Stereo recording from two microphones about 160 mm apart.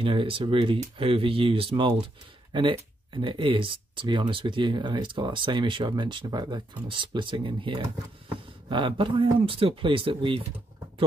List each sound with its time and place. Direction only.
0.0 s speech: 35° right (ahead or behind)